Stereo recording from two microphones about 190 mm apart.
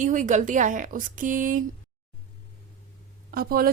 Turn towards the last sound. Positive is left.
turn(degrees=-50)  # may be behind; listen again after turning